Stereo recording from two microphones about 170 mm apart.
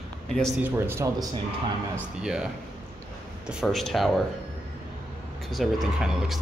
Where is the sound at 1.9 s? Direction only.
5° right (ahead or behind).